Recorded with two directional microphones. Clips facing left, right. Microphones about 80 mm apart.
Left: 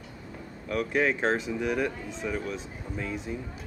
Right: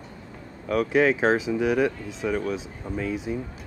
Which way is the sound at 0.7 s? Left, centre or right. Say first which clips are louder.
Right 6 dB; centre.